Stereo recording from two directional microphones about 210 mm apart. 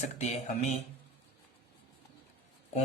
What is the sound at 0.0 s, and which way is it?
Mantra, 30° left (ahead or behind).